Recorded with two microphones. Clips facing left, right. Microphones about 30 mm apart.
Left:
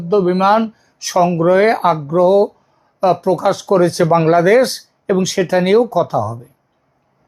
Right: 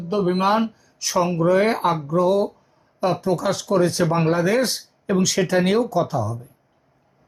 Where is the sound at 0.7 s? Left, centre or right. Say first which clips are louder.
Left 1 dB; left.